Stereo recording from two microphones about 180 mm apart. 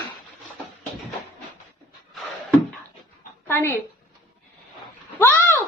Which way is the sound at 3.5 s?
15° left (ahead or behind).